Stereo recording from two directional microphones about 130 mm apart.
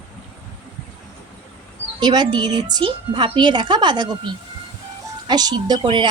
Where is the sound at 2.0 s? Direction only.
35° right (ahead or behind).